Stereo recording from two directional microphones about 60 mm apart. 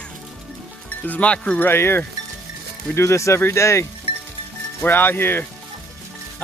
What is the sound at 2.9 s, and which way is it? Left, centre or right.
Speech, left.